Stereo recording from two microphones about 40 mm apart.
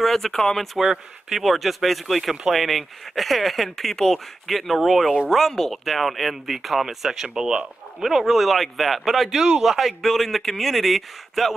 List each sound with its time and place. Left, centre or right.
0.0 s speech: centre
0.7 s speech: centre
7.2 s speech: centre
8.0 s speech: centre